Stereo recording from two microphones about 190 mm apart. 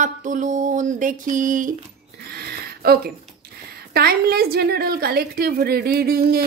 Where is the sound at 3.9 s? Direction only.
55° right (ahead or behind).